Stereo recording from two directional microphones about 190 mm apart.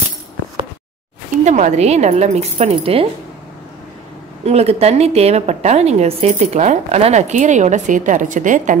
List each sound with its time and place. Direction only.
1.4 s a woman's voice: 40° right (ahead or behind)
4.5 s a woman's voice: 35° right (ahead or behind)